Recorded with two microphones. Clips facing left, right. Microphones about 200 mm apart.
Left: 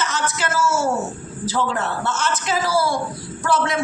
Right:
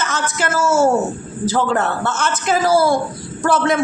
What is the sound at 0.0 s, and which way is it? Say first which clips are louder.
Speech: right 2 dB; 50° right (ahead or behind).